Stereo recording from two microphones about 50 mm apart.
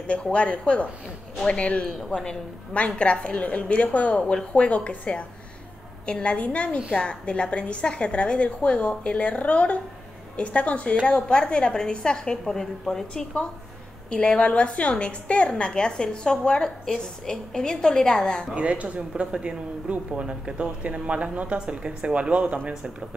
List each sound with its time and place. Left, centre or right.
0.0 s a woman's voice: left
2.0 s a woman's voice: centre
2.2 s a woman's voice: left
14.1 s a woman's voice: left
18.5 s speech: right